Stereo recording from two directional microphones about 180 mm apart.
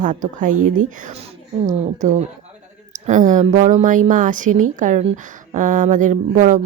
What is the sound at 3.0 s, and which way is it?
Speech, 45° right (ahead or behind).